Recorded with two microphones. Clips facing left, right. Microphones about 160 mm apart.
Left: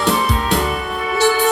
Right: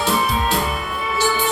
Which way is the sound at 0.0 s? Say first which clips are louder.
Left 2 dB; 75° left (ahead or behind).